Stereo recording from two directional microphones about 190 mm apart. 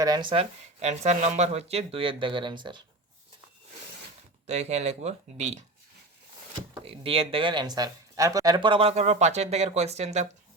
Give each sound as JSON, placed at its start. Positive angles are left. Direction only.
{"t": 0.0, "sound": "speech", "side_deg": -20}
{"t": 4.4, "sound": "speech", "side_deg": -35}
{"t": 6.8, "sound": "speech", "side_deg": -30}